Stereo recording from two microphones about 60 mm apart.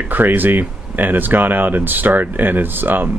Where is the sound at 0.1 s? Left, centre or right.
Right.